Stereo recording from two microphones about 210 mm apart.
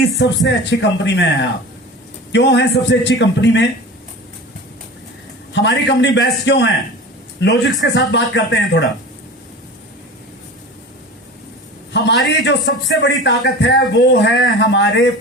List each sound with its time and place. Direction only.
0.2 s speech: 55° left (ahead or behind)
5.5 s a man's voice: 55° left (ahead or behind)
11.9 s speech: 55° left (ahead or behind)